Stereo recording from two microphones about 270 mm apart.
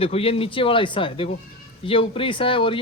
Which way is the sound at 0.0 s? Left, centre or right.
Left.